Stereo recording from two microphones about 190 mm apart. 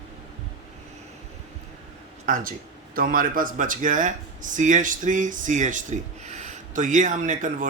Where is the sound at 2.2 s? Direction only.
45° right (ahead or behind).